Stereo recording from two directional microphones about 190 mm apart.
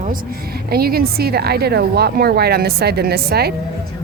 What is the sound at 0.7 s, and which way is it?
Speech, 55° right (ahead or behind).